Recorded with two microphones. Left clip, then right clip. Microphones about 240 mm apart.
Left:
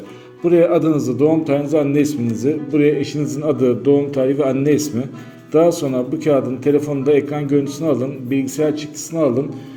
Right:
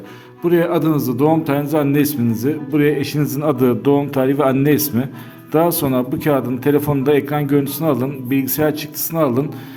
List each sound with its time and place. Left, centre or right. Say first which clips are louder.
0.4 s a man's voice: left 2 dB; right